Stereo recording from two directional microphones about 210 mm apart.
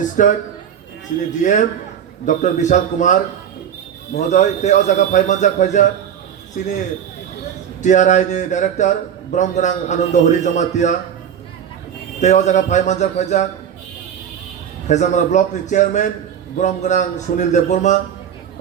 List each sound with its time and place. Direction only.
0.2 s a man's voice: 40° left (ahead or behind)
1.4 s a man's voice: 35° left (ahead or behind)
4.3 s a man's voice: 35° left (ahead or behind)
7.8 s a man's voice: 35° left (ahead or behind)
12.2 s a man's voice: 35° left (ahead or behind)
14.8 s a man's voice: 35° left (ahead or behind)